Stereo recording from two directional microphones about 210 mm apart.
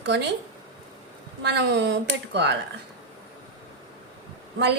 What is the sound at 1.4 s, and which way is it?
A woman's voice, 55° right (ahead or behind).